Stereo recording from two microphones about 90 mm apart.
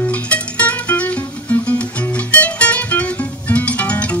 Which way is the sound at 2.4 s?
15° left (ahead or behind).